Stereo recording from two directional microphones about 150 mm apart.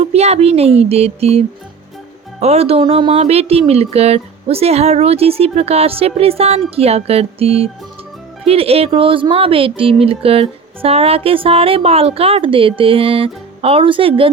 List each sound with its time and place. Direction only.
0.0 s speech: 45° right (ahead or behind)